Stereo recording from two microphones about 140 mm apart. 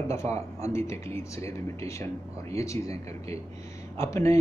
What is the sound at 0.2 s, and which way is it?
Speech, 50° right (ahead or behind).